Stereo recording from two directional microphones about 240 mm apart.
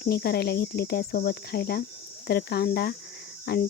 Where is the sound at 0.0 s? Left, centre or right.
Left.